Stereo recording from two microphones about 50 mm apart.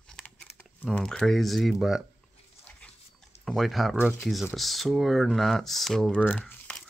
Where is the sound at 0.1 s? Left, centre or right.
Left.